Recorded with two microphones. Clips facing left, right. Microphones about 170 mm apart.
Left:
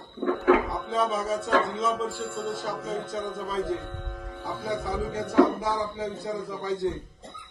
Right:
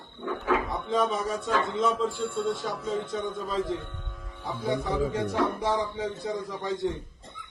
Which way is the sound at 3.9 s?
65° left (ahead or behind).